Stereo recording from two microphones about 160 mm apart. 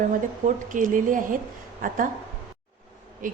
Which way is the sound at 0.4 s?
55° right (ahead or behind).